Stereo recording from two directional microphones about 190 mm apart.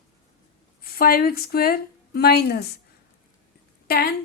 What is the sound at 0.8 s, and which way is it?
A woman's voice, 50° left (ahead or behind).